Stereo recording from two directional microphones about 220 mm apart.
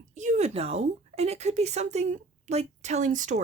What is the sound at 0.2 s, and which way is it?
A woman's voice, 30° right (ahead or behind).